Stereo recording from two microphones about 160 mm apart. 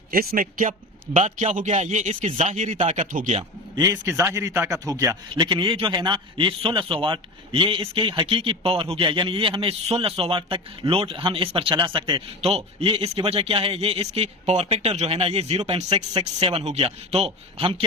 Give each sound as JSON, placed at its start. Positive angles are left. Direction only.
{"t": 0.1, "sound": "a man's voice", "side_deg": -65}
{"t": 0.7, "sound": "a man's voice", "side_deg": -45}
{"t": 3.9, "sound": "a man's voice", "side_deg": -15}